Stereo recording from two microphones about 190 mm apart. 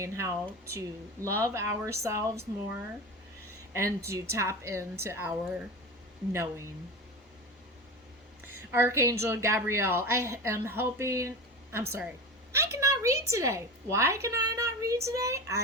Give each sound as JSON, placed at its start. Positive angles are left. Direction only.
{"t": 0.0, "sound": "a woman's voice", "side_deg": -15}
{"t": 8.7, "sound": "a woman's voice", "side_deg": -10}